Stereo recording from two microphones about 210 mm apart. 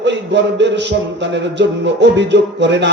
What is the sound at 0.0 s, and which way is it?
Speech, 55° right (ahead or behind).